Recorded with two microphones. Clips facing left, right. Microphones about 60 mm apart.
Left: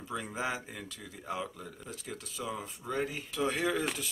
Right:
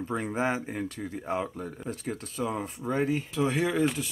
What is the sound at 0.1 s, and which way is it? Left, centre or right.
Speech, right.